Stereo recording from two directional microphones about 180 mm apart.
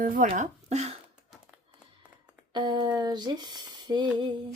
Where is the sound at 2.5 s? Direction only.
25° right (ahead or behind).